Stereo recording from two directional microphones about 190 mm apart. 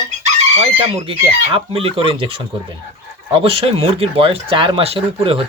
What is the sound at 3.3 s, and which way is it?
Speech, 30° right (ahead or behind).